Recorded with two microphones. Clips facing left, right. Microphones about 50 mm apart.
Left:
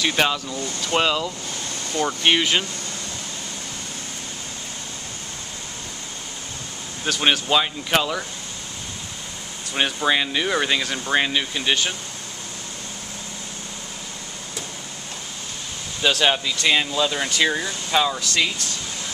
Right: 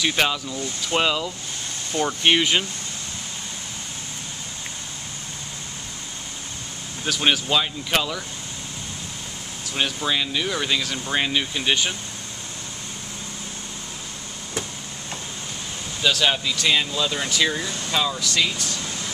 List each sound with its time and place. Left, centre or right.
0.0 s speech: centre
7.1 s speech: centre
9.8 s speech: centre
11.1 s speech: centre
16.0 s speech: centre